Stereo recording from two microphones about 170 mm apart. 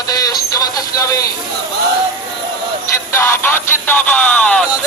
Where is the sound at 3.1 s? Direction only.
15° left (ahead or behind).